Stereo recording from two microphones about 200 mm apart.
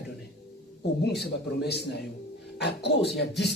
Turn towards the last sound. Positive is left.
turn(degrees=60)  # may be behind; listen again after turning